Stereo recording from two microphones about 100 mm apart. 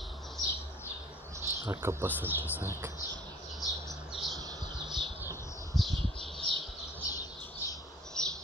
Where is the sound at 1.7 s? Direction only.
25° right (ahead or behind).